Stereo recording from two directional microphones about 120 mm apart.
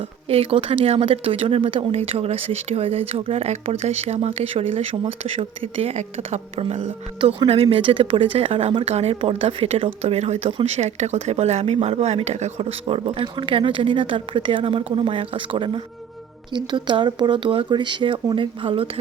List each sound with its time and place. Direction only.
0.3 s speech: 55° right (ahead or behind)